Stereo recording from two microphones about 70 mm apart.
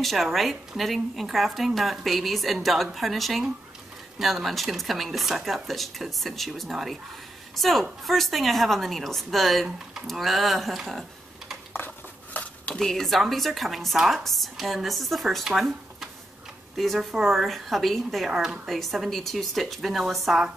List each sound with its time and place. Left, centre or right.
0.0 s speech: centre
12.4 s a sound: left
12.7 s speech: centre